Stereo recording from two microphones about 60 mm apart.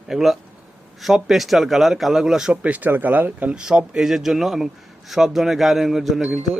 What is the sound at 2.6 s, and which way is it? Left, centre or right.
Speech, right.